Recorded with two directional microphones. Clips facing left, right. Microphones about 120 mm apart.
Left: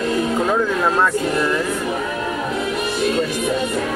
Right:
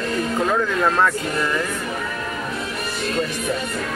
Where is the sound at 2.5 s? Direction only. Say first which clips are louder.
Left 6 dB; 20° left (ahead or behind).